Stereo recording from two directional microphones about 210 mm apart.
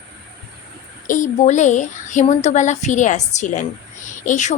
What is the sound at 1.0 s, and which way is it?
A woman's voice, 35° left (ahead or behind).